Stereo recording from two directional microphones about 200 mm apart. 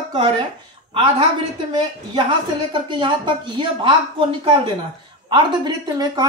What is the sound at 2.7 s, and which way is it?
Speech, 25° right (ahead or behind).